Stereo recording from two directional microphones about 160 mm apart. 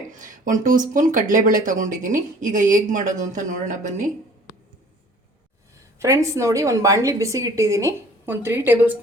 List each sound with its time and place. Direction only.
0.1 s a woman's voice: 55° right (ahead or behind)
6.0 s a woman's voice: 20° right (ahead or behind)